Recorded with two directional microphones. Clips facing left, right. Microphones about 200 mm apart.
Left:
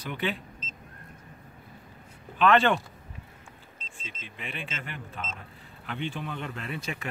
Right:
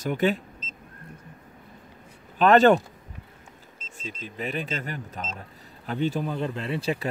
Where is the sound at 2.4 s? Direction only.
40° right (ahead or behind).